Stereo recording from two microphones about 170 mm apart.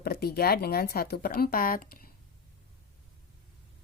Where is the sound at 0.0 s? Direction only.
65° left (ahead or behind).